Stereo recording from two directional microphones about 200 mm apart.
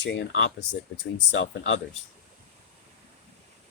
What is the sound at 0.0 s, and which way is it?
Speech, 65° left (ahead or behind).